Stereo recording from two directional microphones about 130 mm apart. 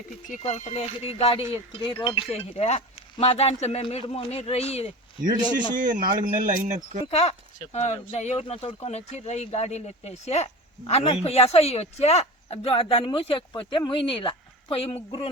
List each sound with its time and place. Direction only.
0.3 s speech: 65° left (ahead or behind)
5.7 s speech: 90° right
7.1 s speech: 55° left (ahead or behind)